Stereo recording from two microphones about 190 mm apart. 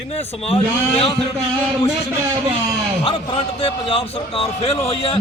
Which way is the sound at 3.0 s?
30° left (ahead or behind).